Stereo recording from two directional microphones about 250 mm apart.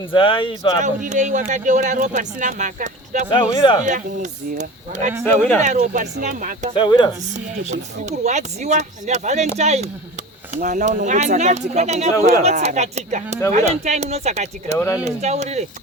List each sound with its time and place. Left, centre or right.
0.1 s speech: left
0.8 s speech: right
3.2 s speech: centre
3.8 s speech: right
6.7 s speech: centre
7.3 s speech: right